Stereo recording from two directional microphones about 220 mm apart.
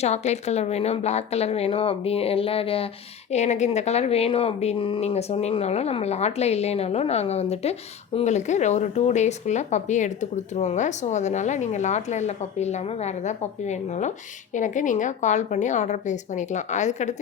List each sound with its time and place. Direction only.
0.0 s speech: 30° left (ahead or behind)